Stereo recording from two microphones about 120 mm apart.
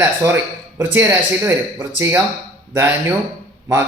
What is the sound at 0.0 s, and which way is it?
A man's voice, 20° right (ahead or behind).